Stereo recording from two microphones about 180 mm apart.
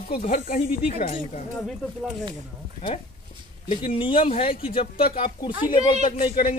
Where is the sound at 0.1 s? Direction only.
45° left (ahead or behind).